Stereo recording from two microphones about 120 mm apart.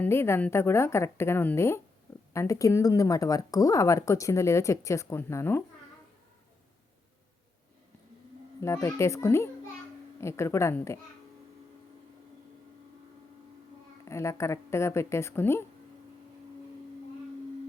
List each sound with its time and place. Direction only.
0.0 s speech: 20° left (ahead or behind)
8.6 s speech: 25° left (ahead or behind)
14.0 s speech: 25° left (ahead or behind)